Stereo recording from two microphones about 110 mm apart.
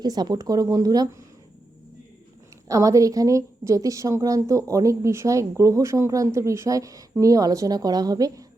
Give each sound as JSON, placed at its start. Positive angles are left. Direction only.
{"t": 0.0, "sound": "a woman's voice", "side_deg": -35}
{"t": 2.6, "sound": "a woman's voice", "side_deg": -30}